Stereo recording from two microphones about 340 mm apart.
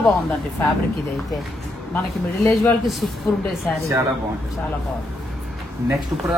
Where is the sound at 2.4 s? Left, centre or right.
Centre.